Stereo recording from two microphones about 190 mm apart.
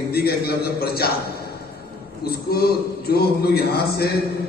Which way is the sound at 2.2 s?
55° left (ahead or behind).